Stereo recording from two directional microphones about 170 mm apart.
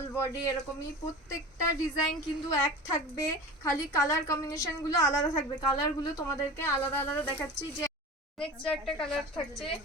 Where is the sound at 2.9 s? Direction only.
15° left (ahead or behind).